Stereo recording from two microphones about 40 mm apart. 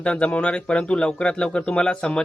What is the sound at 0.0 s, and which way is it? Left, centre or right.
Speech, left.